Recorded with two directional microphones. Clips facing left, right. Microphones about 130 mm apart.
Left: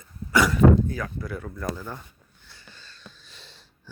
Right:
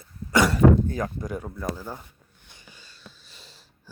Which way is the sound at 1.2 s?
15° right (ahead or behind).